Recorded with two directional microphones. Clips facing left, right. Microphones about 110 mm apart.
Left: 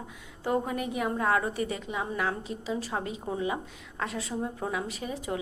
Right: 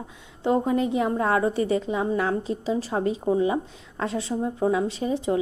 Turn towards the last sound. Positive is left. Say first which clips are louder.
# right 9 dB
turn(degrees=-30)  # may be behind; listen again after turning